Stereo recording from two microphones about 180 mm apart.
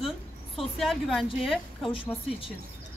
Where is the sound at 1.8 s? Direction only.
30° left (ahead or behind).